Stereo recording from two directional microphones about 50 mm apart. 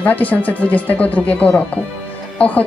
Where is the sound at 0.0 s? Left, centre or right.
Left.